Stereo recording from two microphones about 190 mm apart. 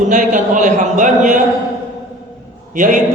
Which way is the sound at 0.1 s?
40° right (ahead or behind).